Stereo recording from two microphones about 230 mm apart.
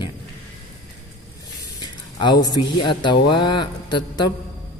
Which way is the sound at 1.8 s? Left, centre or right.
Centre.